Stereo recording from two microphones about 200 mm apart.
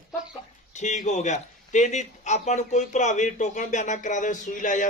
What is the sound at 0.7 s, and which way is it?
A man's voice, 35° left (ahead or behind).